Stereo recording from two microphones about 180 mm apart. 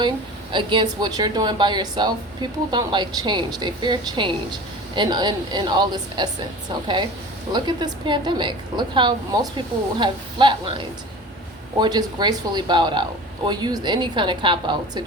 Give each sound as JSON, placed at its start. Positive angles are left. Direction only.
{"t": 0.5, "sound": "speech", "side_deg": -25}
{"t": 7.5, "sound": "speech", "side_deg": -25}